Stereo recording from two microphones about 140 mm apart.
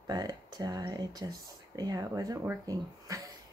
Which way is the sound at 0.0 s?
30° right (ahead or behind).